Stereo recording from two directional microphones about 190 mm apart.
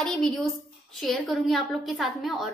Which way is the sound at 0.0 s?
Centre (ahead or behind).